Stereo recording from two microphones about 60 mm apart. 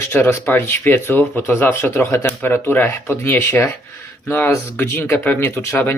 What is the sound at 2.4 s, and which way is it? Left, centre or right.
Speech, left.